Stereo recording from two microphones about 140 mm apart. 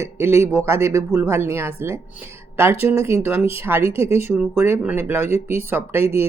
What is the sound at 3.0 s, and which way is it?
Speech, 20° right (ahead or behind).